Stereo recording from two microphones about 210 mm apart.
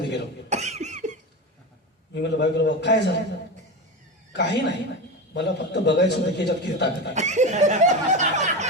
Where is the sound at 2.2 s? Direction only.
55° left (ahead or behind).